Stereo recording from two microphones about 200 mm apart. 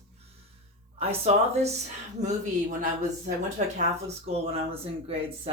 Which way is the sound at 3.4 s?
35° right (ahead or behind).